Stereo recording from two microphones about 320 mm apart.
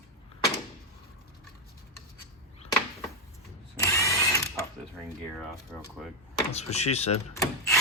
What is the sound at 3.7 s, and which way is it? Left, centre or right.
Drill, centre.